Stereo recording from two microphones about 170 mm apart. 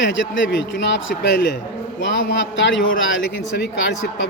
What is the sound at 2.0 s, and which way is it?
A man's voice, 90° left.